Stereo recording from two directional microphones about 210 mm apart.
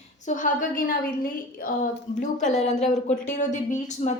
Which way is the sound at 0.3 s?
35° left (ahead or behind).